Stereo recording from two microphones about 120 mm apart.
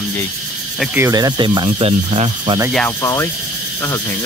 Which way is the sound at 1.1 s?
35° right (ahead or behind).